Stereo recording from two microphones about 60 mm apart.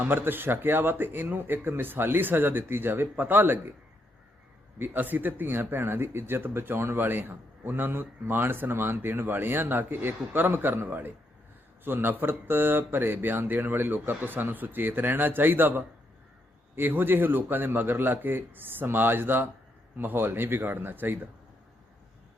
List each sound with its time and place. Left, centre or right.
0.0 s speech: right
4.8 s speech: right